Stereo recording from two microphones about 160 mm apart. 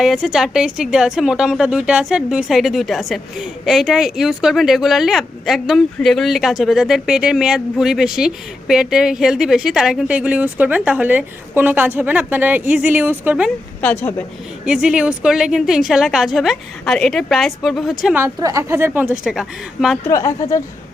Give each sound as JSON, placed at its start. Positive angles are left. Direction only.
{"t": 0.0, "sound": "a woman's voice", "side_deg": 0}
{"t": 13.8, "sound": "a woman's voice", "side_deg": 10}
{"t": 14.6, "sound": "a woman's voice", "side_deg": -5}
{"t": 18.0, "sound": "a woman's voice", "side_deg": -10}
{"t": 20.1, "sound": "speech", "side_deg": 20}